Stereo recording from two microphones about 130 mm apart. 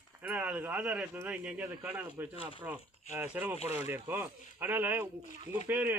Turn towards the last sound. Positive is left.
turn(degrees=-15)  # may be behind; listen again after turning